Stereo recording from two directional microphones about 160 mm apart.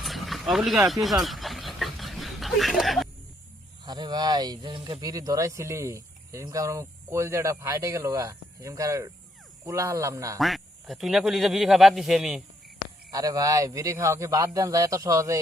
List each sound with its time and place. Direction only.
0.0 s a sound: centre (ahead or behind)
3.8 s speech: 25° right (ahead or behind)
10.4 s a man's voice: centre (ahead or behind)
13.1 s speech: 25° right (ahead or behind)